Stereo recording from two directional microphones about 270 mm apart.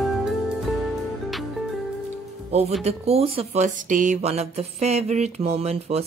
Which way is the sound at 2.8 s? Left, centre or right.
Right.